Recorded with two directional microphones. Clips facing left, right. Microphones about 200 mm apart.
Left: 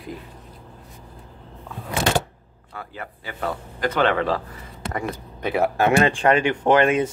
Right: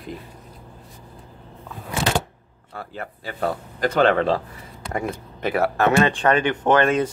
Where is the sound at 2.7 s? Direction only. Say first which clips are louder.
Right 2 dB; 45° right (ahead or behind).